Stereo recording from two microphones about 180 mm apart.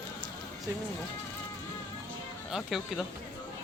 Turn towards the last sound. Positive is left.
turn(degrees=0)  # may be behind; listen again after turning